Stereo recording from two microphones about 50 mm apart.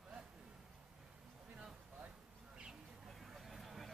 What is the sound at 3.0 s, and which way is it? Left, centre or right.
Vehicle, centre.